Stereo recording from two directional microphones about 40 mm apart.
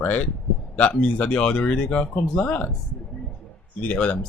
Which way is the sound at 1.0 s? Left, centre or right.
Left.